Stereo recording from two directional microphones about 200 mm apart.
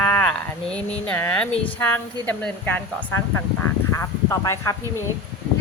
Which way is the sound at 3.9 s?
15° left (ahead or behind).